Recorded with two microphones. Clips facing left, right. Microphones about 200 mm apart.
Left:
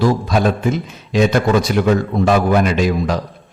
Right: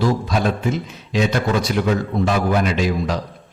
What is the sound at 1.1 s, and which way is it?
Speech, 50° left (ahead or behind).